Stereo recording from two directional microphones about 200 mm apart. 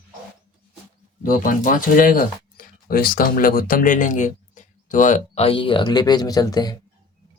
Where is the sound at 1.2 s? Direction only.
40° left (ahead or behind); by 6.7 s 20° left (ahead or behind).